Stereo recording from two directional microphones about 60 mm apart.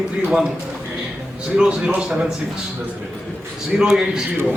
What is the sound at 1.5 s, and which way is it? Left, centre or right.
Speech, centre.